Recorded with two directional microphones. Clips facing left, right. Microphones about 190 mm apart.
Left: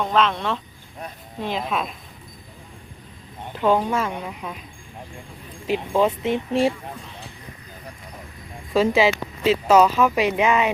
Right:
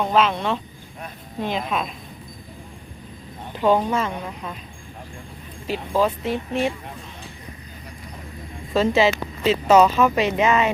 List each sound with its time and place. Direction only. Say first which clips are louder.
0.0 s speech: right 1 dB; 5° right (ahead or behind)
3.5 s speech: right 1 dB; centre (ahead or behind)
6.0 s speech: even; 25° left (ahead or behind)
8.7 s speech: even; 10° left (ahead or behind)